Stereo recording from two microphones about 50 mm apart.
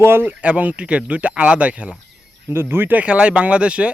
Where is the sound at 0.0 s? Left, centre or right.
Right.